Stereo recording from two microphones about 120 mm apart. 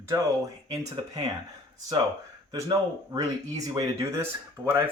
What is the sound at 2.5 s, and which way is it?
Speech, 35° right (ahead or behind).